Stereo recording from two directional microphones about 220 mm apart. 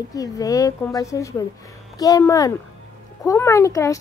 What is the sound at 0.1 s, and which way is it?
Speech, 15° left (ahead or behind).